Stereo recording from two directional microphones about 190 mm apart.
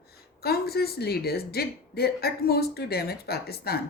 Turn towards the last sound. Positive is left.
turn(degrees=55)  # may be behind; listen again after turning